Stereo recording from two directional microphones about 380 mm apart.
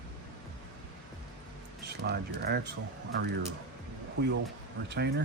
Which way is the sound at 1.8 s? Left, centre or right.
Right.